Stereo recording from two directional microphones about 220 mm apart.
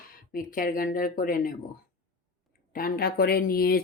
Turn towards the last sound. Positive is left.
turn(degrees=45)  # may be behind; listen again after turning